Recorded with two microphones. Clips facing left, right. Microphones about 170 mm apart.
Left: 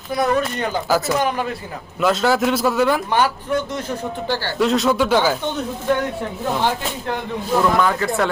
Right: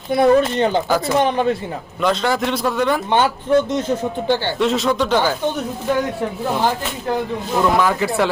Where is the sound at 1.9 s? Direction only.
5° left (ahead or behind).